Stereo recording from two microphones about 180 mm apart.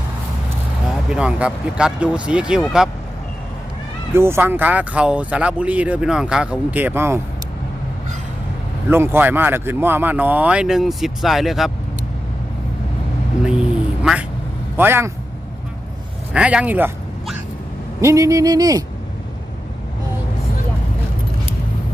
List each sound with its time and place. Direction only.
1.1 s speech: 5° right (ahead or behind)
4.1 s speech: 15° right (ahead or behind)
8.9 s speech: 10° right (ahead or behind)
13.4 s quack: 5° right (ahead or behind)
14.8 s speech: 10° right (ahead or behind)
16.3 s speech: 5° right (ahead or behind)